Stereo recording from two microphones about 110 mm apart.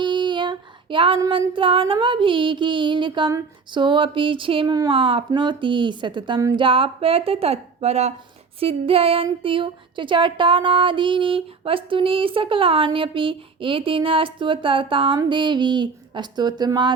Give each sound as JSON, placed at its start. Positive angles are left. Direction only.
{"t": 0.0, "sound": "female singing", "side_deg": -45}
{"t": 1.3, "sound": "speech", "side_deg": -50}
{"t": 4.6, "sound": "a woman's voice", "side_deg": -35}
{"t": 4.9, "sound": "speech", "side_deg": -55}
{"t": 8.6, "sound": "speech", "side_deg": -60}